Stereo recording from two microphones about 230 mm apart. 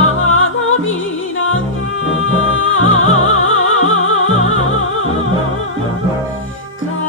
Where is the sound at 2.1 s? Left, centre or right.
Left.